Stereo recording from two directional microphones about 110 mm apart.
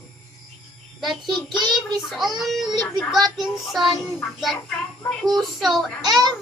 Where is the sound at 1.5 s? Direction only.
40° right (ahead or behind).